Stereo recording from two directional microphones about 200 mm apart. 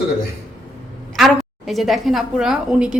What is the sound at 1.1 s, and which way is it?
A woman's voice, centre (ahead or behind).